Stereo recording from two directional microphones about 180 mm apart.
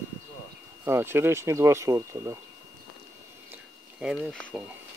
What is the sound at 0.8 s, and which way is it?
Speech, 15° right (ahead or behind).